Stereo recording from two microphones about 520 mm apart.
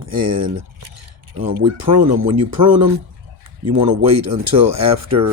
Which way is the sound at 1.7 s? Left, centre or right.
Right.